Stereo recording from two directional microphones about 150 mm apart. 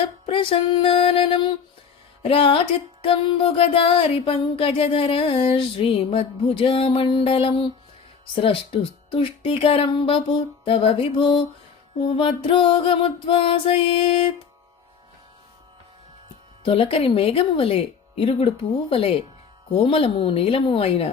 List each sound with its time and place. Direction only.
0.0 s music: 35° left (ahead or behind)
16.6 s music: 35° left (ahead or behind)